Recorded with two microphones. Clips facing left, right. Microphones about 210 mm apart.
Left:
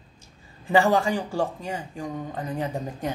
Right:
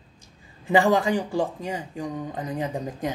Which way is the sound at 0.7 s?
20° right (ahead or behind).